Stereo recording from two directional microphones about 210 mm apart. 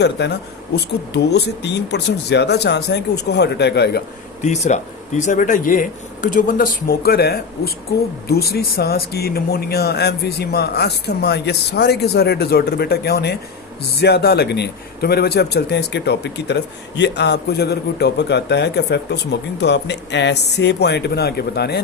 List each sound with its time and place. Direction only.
0.2 s speech: 55° left (ahead or behind)
4.4 s speech: 35° left (ahead or behind); by 21.8 s 50° left (ahead or behind)